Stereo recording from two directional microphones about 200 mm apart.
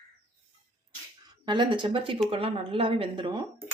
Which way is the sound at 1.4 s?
25° right (ahead or behind).